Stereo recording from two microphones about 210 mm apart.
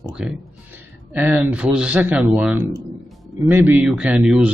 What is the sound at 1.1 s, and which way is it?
Speech, 10° right (ahead or behind).